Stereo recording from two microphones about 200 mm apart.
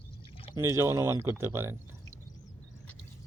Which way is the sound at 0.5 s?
15° right (ahead or behind).